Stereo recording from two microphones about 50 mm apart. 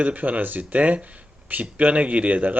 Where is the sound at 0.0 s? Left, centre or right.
Right.